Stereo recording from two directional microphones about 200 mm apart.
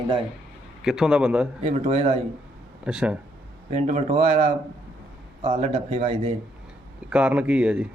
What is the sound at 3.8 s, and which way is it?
Speech, 35° right (ahead or behind).